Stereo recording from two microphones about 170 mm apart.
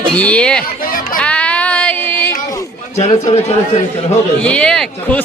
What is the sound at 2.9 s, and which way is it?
Speech, 40° left (ahead or behind).